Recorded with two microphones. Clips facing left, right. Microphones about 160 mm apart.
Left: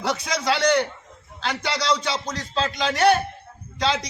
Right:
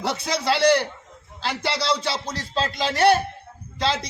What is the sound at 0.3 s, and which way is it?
Speech, 30° right (ahead or behind).